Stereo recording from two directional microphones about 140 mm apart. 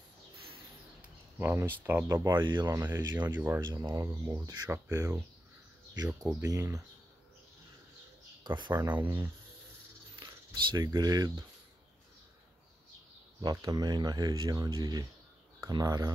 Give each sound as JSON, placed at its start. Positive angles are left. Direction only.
{"t": 1.4, "sound": "speech", "side_deg": -15}
{"t": 8.5, "sound": "speech", "side_deg": -35}
{"t": 8.7, "sound": "speech", "side_deg": -15}
{"t": 10.1, "sound": "a sound", "side_deg": -30}
{"t": 10.9, "sound": "speech", "side_deg": -30}
{"t": 13.4, "sound": "speech", "side_deg": -25}